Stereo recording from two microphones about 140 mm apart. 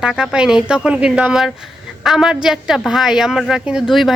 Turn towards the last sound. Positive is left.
turn(degrees=0)  # may be behind; listen again after turning